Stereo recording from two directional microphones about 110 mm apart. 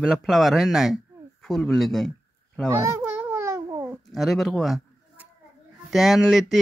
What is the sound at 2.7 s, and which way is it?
Speech, 25° right (ahead or behind).